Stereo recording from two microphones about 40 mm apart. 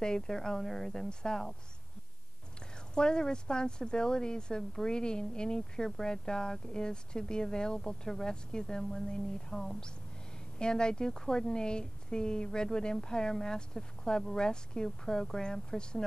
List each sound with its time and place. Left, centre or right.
0.0 s speech: centre
2.9 s a woman's voice: left